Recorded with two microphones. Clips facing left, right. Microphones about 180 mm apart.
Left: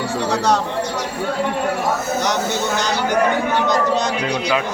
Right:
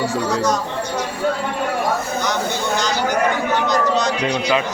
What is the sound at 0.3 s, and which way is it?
Speech, 70° left (ahead or behind).